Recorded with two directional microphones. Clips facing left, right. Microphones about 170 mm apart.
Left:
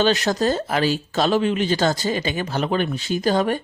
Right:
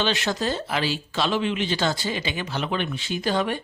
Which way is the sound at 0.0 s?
40° left (ahead or behind).